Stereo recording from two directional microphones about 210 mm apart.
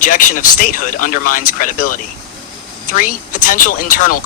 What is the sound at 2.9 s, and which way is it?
A man's voice, 40° left (ahead or behind).